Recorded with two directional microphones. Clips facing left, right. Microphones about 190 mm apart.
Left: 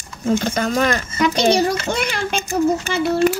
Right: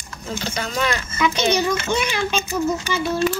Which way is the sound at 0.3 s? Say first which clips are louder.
Left 8 dB; 50° left (ahead or behind).